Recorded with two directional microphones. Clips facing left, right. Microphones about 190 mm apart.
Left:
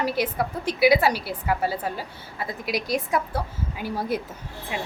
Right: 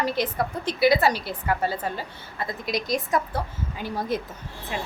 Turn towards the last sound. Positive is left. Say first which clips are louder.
# even
turn(degrees=10)  # may be behind; listen again after turning